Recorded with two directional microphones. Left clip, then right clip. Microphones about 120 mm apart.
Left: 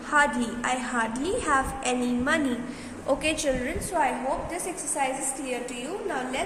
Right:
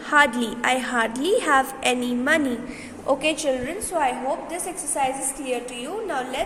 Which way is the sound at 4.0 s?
80° right.